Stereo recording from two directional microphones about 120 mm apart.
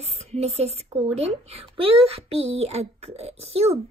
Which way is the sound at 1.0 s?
55° right (ahead or behind).